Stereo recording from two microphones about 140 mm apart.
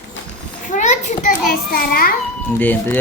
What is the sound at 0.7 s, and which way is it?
Children playing, 60° left (ahead or behind).